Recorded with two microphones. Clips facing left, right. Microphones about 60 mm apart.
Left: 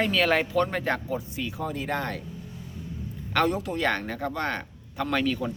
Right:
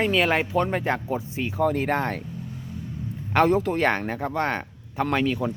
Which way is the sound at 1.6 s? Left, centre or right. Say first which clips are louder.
Right 8 dB; right.